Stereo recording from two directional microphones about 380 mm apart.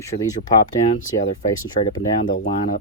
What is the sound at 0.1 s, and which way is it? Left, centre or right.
Speech, centre.